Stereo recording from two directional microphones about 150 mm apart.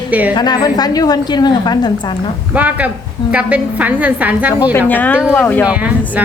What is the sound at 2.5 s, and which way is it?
A woman's voice, 10° right (ahead or behind).